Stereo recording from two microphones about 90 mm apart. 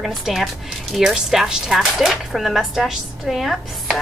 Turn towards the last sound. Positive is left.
turn(degrees=0)  # may be behind; listen again after turning